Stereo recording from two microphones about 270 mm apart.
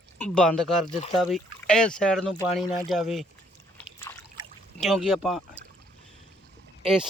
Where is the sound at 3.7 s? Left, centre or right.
Centre.